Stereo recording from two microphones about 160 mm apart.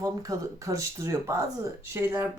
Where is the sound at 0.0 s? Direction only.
20° right (ahead or behind).